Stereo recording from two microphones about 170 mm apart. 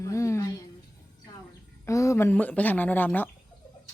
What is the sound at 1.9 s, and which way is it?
Speech, 15° left (ahead or behind).